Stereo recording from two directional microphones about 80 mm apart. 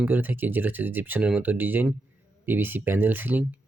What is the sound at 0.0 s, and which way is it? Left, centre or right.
Speech, right.